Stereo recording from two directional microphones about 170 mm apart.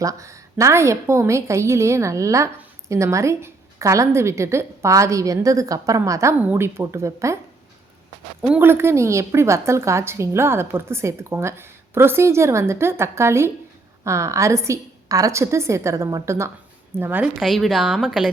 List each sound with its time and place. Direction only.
0.0 s a woman's voice: 20° right (ahead or behind)
8.4 s a woman's voice: 10° right (ahead or behind)
17.4 s a woman's voice: centre (ahead or behind)